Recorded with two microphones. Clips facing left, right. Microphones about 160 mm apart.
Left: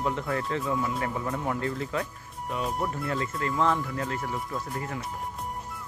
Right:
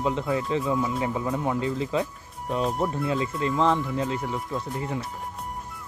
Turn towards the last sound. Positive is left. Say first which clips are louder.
# right 3 dB
turn(degrees=-20)  # may be behind; listen again after turning